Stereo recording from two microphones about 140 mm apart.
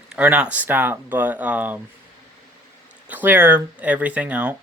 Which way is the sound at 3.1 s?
15° right (ahead or behind).